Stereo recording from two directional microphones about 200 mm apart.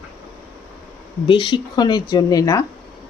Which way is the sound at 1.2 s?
25° left (ahead or behind).